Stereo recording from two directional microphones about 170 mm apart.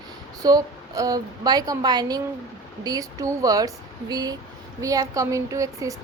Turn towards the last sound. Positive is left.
turn(degrees=-20)  # may be behind; listen again after turning